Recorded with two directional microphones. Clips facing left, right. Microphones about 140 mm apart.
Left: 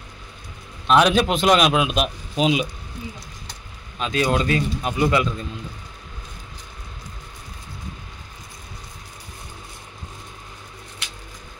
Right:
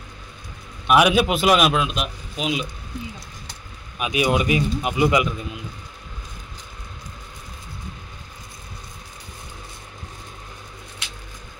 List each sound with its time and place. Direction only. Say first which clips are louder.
0.8 s a man's voice: even; 10° right (ahead or behind)
1.7 s a man's voice: left 3 dB; 15° left (ahead or behind)
2.3 s speech: left 6 dB; 25° left (ahead or behind)
4.0 s a man's voice: even; 15° right (ahead or behind)